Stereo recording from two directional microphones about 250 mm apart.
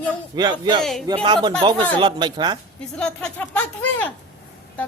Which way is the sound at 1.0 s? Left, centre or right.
Centre.